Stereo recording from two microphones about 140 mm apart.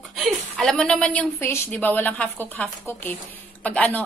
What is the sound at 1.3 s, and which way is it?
A woman's voice, 15° left (ahead or behind).